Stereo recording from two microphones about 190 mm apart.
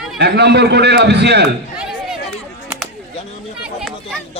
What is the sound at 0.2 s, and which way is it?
A man's voice, 60° right (ahead or behind).